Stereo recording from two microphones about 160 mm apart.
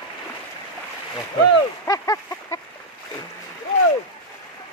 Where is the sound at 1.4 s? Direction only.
20° left (ahead or behind).